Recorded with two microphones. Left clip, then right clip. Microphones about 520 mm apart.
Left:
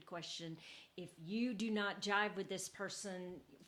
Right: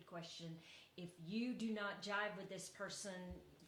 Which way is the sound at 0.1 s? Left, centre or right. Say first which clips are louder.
Left 5 dB; left.